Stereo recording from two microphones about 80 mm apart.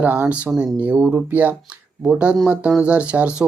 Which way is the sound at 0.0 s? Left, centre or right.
Right.